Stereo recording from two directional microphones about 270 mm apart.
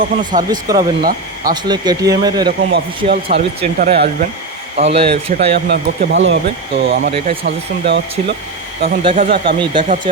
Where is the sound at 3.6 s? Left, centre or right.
Right.